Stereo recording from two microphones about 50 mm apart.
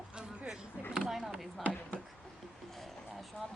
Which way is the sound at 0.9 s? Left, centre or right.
Centre.